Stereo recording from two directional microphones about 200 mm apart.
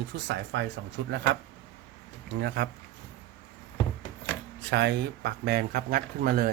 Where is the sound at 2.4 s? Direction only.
55° right (ahead or behind).